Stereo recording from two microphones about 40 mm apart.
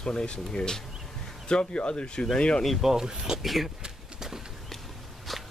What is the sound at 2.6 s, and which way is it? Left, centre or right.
Speech, centre.